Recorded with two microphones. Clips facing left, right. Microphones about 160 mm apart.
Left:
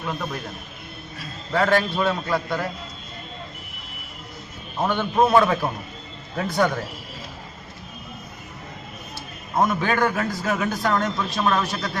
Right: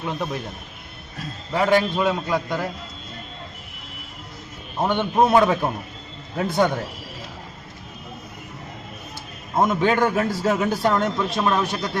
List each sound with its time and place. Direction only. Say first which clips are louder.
1.5 s a man's voice: right 1 dB; 10° right (ahead or behind)
4.8 s a man's voice: right 1 dB; 25° right (ahead or behind)
9.6 s a man's voice: right 2 dB; 20° right (ahead or behind)
11.2 s a man's voice: right 1 dB; 15° right (ahead or behind)